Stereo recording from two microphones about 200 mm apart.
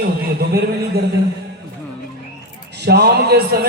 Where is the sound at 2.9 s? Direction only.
55° right (ahead or behind).